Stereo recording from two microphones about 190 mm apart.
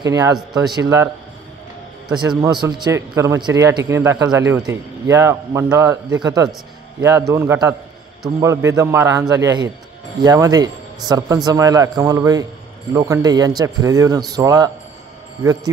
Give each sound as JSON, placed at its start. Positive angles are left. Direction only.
{"t": 0.0, "sound": "a man's voice", "side_deg": -20}
{"t": 2.1, "sound": "a man's voice", "side_deg": -20}